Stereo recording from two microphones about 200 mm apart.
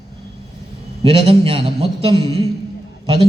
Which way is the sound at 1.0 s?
30° right (ahead or behind).